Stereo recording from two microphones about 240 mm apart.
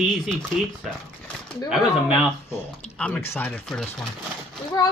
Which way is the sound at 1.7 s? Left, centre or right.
Centre.